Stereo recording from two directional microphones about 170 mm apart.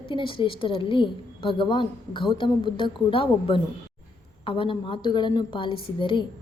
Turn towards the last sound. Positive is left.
turn(degrees=30)  # may be behind; listen again after turning